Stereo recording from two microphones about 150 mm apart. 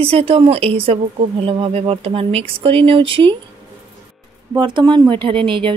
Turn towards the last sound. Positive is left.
turn(degrees=-35)  # may be behind; listen again after turning